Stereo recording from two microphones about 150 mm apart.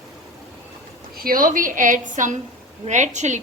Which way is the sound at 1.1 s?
75° right (ahead or behind).